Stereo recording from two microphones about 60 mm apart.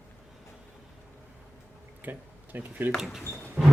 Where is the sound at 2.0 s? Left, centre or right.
Right.